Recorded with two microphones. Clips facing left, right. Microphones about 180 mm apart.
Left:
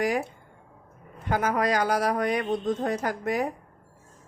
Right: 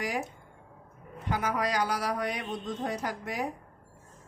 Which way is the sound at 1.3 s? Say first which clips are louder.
Left 5 dB; 50° left (ahead or behind).